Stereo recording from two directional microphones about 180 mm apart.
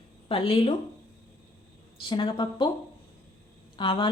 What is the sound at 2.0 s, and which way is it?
Speech, 25° left (ahead or behind).